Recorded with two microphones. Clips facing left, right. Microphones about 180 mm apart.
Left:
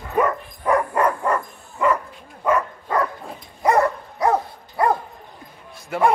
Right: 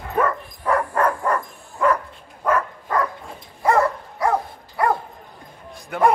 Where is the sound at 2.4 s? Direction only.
10° left (ahead or behind).